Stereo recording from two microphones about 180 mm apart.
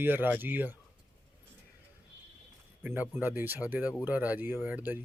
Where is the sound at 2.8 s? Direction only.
10° right (ahead or behind).